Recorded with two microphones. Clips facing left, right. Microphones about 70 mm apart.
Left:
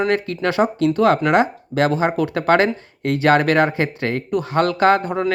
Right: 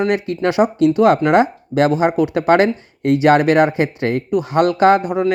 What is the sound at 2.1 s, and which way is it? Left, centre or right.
Speech, centre.